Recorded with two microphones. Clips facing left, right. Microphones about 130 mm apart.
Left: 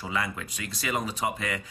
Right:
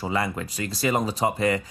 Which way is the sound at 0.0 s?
35° right (ahead or behind).